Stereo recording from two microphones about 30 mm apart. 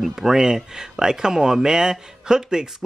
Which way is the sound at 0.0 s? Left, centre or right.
Centre.